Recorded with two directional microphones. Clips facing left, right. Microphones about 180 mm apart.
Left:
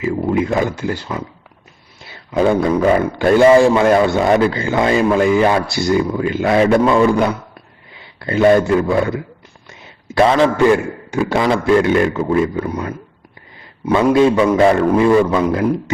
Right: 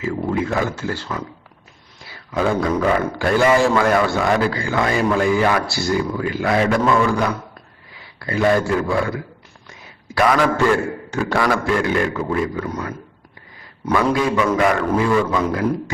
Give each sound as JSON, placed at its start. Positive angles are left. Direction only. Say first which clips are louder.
{"t": 0.0, "sound": "a man's voice", "louder": "left 4 dB", "side_deg": 15}
{"t": 13.9, "sound": "a man's voice", "louder": "left 6 dB", "side_deg": 25}